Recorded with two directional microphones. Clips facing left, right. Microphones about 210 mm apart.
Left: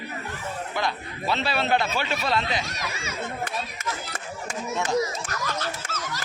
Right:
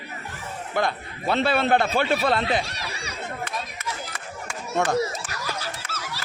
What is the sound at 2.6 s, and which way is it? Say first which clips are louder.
Speech: right 1 dB; 35° right (ahead or behind).